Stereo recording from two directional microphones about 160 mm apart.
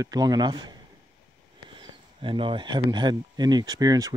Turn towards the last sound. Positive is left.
turn(degrees=-25)  # may be behind; listen again after turning